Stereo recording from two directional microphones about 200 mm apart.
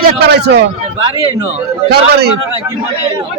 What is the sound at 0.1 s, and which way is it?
Speech, 55° right (ahead or behind).